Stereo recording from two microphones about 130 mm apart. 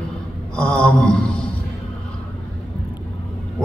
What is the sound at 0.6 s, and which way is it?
Mantra, 10° left (ahead or behind).